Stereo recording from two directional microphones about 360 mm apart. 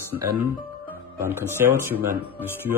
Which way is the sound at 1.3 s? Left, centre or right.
Centre.